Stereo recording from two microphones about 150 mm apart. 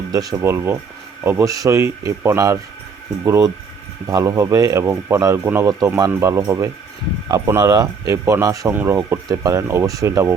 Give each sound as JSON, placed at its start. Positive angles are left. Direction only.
{"t": 0.1, "sound": "speech", "side_deg": -25}